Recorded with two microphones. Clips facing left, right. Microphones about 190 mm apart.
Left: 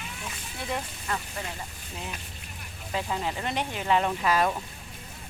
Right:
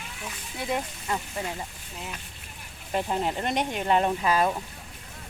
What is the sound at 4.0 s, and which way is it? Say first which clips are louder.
Speech: right 1 dB; 20° right (ahead or behind).